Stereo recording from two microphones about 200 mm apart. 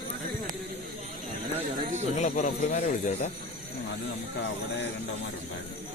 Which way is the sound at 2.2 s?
40° left (ahead or behind).